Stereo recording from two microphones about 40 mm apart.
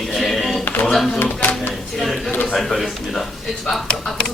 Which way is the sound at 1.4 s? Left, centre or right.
Left.